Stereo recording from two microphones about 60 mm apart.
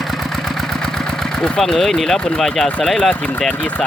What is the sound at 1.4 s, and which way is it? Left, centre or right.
Speech, centre.